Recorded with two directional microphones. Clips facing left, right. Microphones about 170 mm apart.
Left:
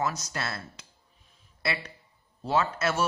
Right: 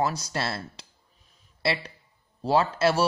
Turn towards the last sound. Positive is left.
turn(degrees=-30)  # may be behind; listen again after turning